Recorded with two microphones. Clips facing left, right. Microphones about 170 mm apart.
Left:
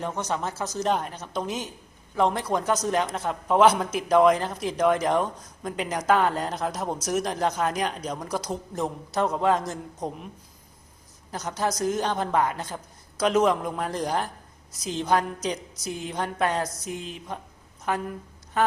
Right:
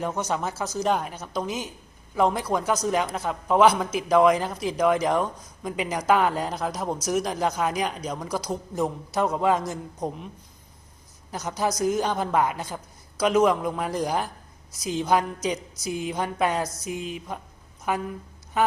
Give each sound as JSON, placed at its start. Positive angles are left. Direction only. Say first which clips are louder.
{"t": 0.0, "sound": "a man's voice", "louder": "right 2 dB", "side_deg": -5}
{"t": 11.3, "sound": "a man's voice", "louder": "right 1 dB", "side_deg": 0}